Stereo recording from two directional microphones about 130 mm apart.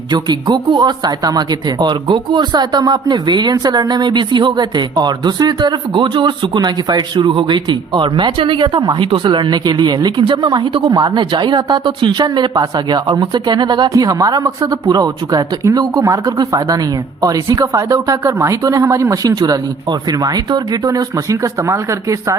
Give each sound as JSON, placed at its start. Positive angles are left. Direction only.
{"t": 0.1, "sound": "speech", "side_deg": -35}